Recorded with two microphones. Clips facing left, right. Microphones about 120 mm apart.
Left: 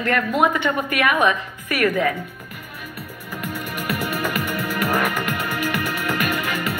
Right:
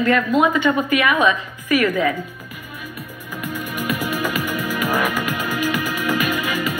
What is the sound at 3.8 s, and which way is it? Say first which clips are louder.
Music: right 1 dB; 55° left (ahead or behind).